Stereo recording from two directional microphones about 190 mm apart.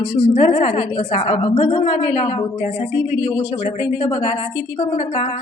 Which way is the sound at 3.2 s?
20° left (ahead or behind).